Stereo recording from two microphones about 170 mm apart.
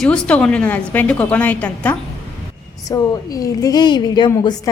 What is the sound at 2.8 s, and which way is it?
A woman's voice, 20° left (ahead or behind).